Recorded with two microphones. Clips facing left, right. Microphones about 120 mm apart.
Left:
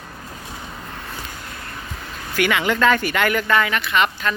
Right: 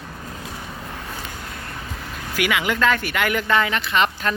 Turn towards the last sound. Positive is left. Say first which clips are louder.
# left 1 dB
turn(degrees=-35)  # may be behind; listen again after turning